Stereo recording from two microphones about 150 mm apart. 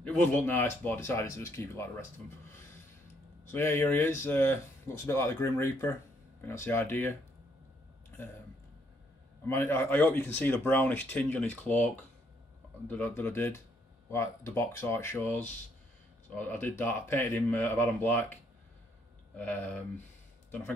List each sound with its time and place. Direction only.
0.0 s speech: 10° left (ahead or behind)
3.4 s speech: 15° left (ahead or behind)
9.5 s speech: 15° left (ahead or behind)
19.3 s speech: 10° left (ahead or behind)